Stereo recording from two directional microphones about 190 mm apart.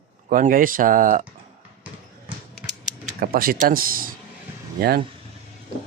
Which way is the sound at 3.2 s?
50° right (ahead or behind).